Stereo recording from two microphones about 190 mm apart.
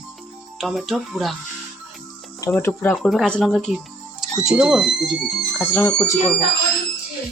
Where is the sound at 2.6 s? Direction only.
10° left (ahead or behind).